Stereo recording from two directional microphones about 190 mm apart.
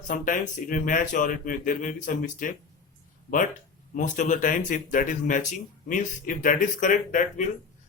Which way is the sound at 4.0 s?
40° left (ahead or behind).